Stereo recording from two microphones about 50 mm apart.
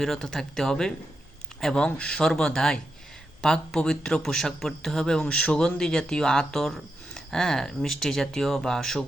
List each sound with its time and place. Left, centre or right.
0.0 s speech: centre